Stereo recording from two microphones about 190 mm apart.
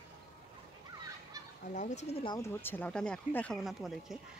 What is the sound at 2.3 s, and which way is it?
Speech, 15° left (ahead or behind).